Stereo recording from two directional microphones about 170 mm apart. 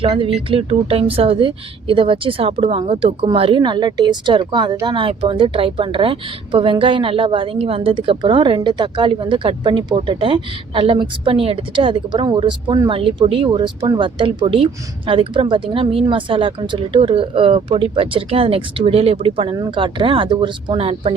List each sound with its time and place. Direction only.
0.0 s speech: 30° right (ahead or behind)